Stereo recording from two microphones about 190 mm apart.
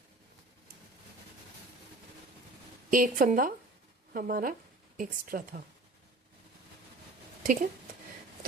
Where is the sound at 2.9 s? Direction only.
45° right (ahead or behind).